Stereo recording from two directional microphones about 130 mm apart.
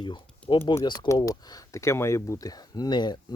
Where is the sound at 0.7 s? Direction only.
25° left (ahead or behind).